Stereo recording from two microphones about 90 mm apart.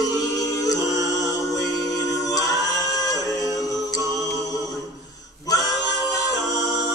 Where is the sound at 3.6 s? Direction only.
40° left (ahead or behind).